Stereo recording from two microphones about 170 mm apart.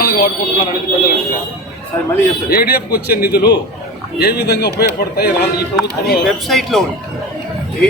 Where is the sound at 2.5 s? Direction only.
65° left (ahead or behind).